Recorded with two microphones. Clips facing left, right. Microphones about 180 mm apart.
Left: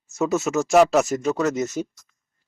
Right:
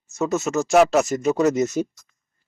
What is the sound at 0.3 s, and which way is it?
Speech, 5° left (ahead or behind).